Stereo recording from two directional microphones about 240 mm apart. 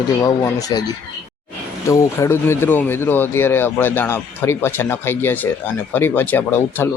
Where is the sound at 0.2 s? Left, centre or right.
Centre.